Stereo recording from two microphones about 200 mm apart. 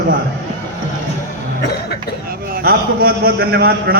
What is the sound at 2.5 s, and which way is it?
A man's voice, 50° right (ahead or behind).